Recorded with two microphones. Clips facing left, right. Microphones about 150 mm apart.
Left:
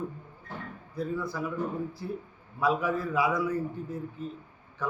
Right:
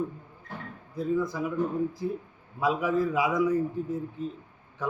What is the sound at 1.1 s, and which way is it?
Speech, 20° right (ahead or behind).